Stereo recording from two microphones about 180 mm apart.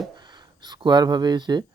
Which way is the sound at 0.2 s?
25° right (ahead or behind).